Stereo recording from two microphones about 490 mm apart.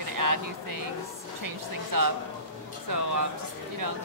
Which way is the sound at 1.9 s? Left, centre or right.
Right.